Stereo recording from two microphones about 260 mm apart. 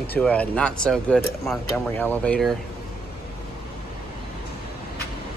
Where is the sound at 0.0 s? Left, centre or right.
Centre.